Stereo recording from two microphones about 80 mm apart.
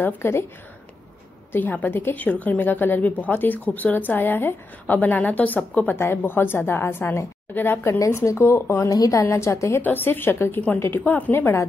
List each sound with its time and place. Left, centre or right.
0.0 s a woman's voice: left
1.5 s a woman's voice: left
8.0 s a woman's voice: left
9.8 s a woman's voice: left